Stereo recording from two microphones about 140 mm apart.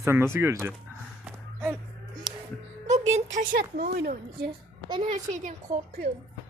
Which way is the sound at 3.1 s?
50° right (ahead or behind).